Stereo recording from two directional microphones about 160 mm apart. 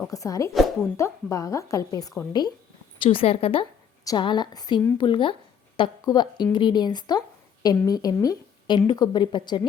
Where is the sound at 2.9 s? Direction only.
35° left (ahead or behind).